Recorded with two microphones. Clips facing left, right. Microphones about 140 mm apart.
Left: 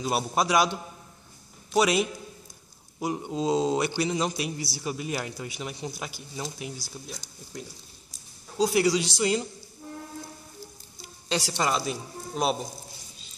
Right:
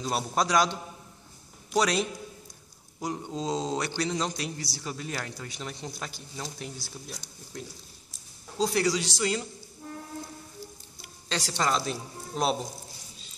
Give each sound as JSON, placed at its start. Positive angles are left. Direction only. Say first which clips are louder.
{"t": 0.0, "sound": "speech", "louder": "left 2 dB", "side_deg": 10}
{"t": 11.2, "sound": "speech", "louder": "left 2 dB", "side_deg": 10}